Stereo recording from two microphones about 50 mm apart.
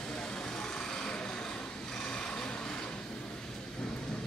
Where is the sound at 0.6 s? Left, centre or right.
Centre.